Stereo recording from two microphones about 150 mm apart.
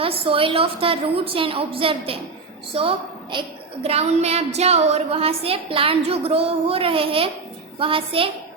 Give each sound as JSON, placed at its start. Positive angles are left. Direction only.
{"t": 0.0, "sound": "a woman's voice", "side_deg": -35}
{"t": 3.8, "sound": "a woman's voice", "side_deg": -45}